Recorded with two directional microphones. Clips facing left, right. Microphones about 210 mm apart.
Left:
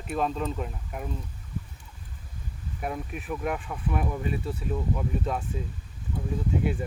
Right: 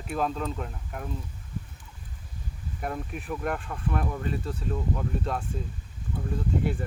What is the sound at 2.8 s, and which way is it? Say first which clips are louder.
Speech: even; 5° left (ahead or behind).